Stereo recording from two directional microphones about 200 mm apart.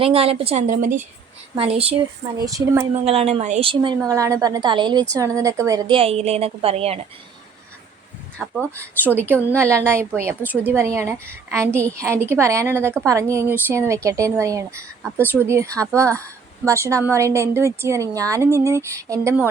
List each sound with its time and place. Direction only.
0.0 s a woman's voice: 30° right (ahead or behind)
2.5 s a woman's voice: 15° right (ahead or behind)
3.0 s a woman's voice: 30° right (ahead or behind)
6.0 s a woman's voice: 30° right (ahead or behind)
8.4 s speech: centre (ahead or behind)
8.7 s a woman's voice: 10° right (ahead or behind)